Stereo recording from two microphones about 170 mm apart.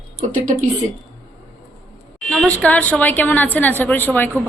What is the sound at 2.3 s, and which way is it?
A woman's voice, 5° left (ahead or behind).